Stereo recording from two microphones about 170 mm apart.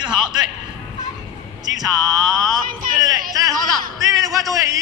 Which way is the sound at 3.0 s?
20° right (ahead or behind).